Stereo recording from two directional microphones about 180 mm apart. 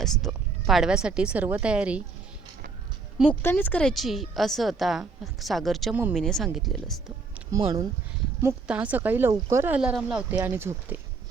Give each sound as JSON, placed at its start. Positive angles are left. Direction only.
{"t": 0.0, "sound": "speech", "side_deg": 0}
{"t": 3.4, "sound": "a woman's voice", "side_deg": 10}
{"t": 7.5, "sound": "speech", "side_deg": -20}